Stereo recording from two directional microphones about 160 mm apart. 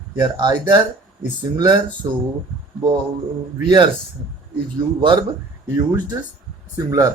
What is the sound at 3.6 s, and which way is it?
Speech, 30° right (ahead or behind).